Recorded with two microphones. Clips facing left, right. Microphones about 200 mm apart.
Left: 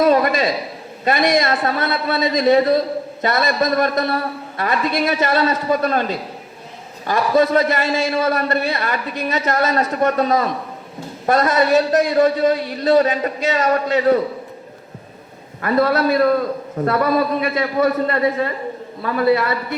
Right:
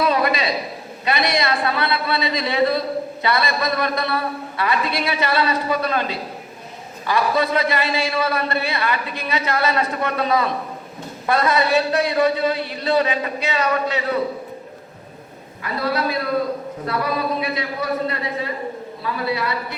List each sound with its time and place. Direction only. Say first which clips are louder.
0.0 s a man's voice: left 5 dB; 45° left (ahead or behind)
15.6 s a man's voice: left 7 dB; 50° left (ahead or behind)